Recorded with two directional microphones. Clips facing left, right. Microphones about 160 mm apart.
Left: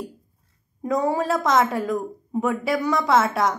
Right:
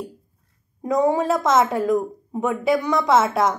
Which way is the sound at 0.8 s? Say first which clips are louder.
Right 3 dB; 20° right (ahead or behind).